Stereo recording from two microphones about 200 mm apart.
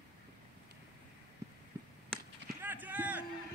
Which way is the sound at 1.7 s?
15° right (ahead or behind).